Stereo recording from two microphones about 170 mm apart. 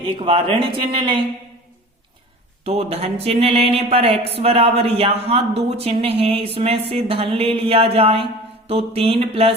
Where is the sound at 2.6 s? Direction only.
35° right (ahead or behind).